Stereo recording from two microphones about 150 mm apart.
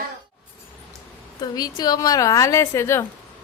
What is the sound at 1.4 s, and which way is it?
A woman's voice, 25° left (ahead or behind).